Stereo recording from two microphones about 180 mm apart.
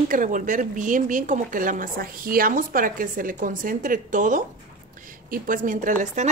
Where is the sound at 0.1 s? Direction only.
45° right (ahead or behind).